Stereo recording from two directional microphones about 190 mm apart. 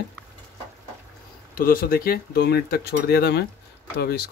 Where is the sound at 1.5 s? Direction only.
50° left (ahead or behind).